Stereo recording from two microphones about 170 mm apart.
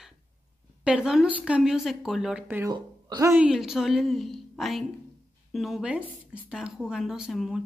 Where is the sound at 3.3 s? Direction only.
5° right (ahead or behind).